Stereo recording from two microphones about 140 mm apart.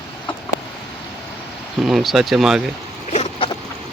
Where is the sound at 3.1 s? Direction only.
45° left (ahead or behind).